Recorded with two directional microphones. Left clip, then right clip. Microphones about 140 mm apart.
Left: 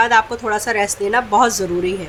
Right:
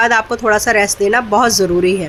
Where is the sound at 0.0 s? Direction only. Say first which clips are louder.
Right 2 dB; 25° right (ahead or behind).